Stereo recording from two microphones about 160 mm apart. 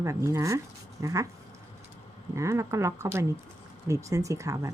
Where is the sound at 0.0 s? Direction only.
20° right (ahead or behind).